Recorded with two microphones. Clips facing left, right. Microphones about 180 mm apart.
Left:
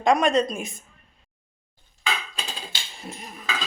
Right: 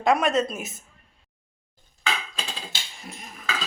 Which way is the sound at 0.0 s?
5° right (ahead or behind).